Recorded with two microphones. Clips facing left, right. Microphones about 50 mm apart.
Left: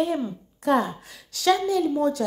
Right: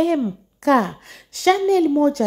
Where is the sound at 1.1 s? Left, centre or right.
Right.